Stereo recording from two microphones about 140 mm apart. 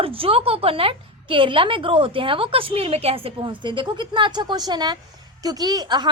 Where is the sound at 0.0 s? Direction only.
40° right (ahead or behind).